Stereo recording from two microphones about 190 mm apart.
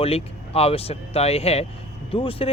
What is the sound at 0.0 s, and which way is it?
Speech, 30° left (ahead or behind).